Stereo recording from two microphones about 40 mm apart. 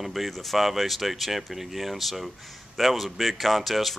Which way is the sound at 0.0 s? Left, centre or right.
Centre.